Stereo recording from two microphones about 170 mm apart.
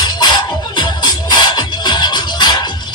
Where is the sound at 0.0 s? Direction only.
25° left (ahead or behind).